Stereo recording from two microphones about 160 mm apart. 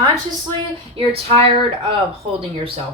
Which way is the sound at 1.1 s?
35° right (ahead or behind).